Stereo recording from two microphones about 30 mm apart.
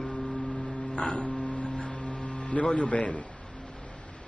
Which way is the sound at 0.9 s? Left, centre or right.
Left.